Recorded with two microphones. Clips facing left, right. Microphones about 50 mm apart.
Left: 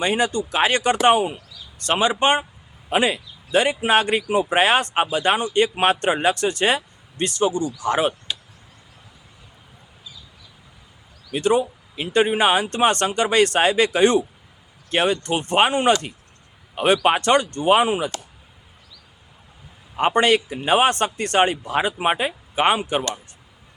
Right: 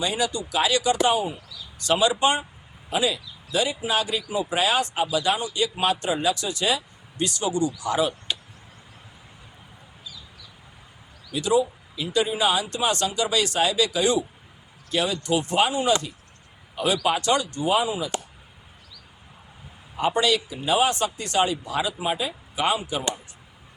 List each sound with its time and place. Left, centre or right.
0.0 s speech: left
1.8 s speech: left
11.3 s speech: left
20.0 s speech: left